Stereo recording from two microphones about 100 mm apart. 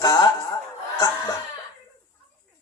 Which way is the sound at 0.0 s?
40° left (ahead or behind).